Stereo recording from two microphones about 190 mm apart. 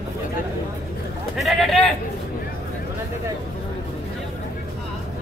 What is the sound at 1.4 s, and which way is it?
Speech, centre (ahead or behind).